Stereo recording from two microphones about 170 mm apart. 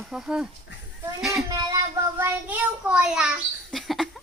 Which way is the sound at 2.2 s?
10° right (ahead or behind).